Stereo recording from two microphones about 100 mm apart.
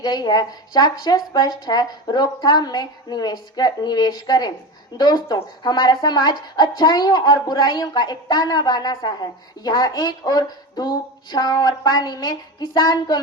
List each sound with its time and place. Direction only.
0.0 s speech: 45° left (ahead or behind)